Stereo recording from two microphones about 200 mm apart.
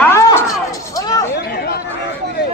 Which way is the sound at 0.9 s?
20° left (ahead or behind).